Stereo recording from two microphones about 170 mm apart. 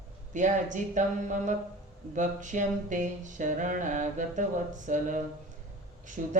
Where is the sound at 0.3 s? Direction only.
45° right (ahead or behind).